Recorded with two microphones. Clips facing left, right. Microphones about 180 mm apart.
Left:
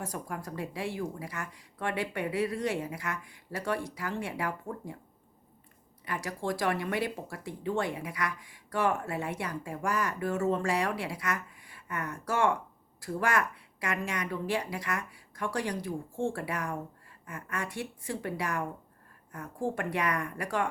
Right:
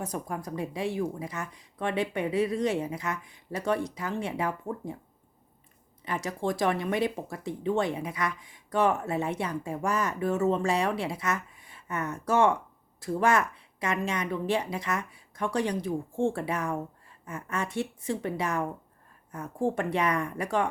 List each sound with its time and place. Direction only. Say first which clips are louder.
0.0 s speech: right 3 dB; 20° right (ahead or behind)
6.1 s speech: right 3 dB; 20° right (ahead or behind)